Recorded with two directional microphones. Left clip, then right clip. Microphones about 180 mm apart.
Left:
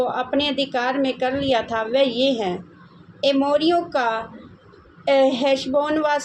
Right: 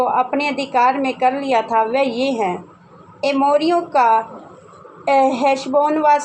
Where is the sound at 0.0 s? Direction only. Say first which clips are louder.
Right 4 dB; 15° right (ahead or behind).